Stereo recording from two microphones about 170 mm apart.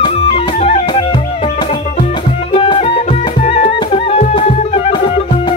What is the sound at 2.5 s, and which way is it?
Music, 35° left (ahead or behind).